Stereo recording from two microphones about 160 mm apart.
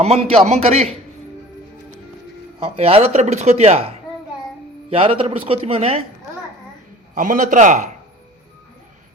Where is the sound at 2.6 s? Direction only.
35° right (ahead or behind).